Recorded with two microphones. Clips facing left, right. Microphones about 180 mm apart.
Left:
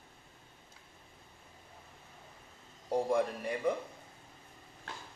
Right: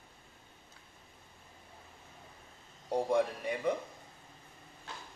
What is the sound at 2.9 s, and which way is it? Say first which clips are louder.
Speech: even; centre (ahead or behind).